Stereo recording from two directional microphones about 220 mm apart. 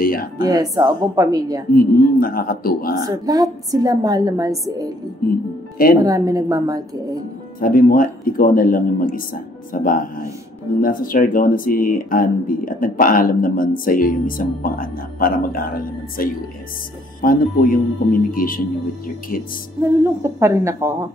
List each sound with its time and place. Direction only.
0.0 s speech: 40° left (ahead or behind)
0.4 s a woman's voice: 15° right (ahead or behind)
1.7 s speech: 40° left (ahead or behind)
3.1 s a woman's voice: 15° right (ahead or behind)
5.9 s a woman's voice: 15° right (ahead or behind)
7.6 s speech: 40° left (ahead or behind)
19.8 s a woman's voice: 10° right (ahead or behind)